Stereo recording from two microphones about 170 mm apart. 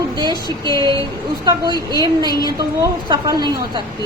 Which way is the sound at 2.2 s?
25° right (ahead or behind).